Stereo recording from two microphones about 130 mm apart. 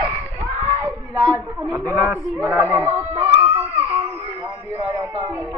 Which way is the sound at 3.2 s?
15° right (ahead or behind).